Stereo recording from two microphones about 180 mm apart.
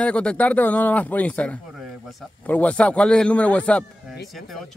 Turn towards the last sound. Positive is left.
turn(degrees=5)  # may be behind; listen again after turning